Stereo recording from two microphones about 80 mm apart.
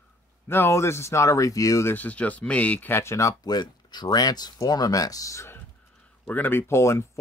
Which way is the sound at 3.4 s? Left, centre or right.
Left.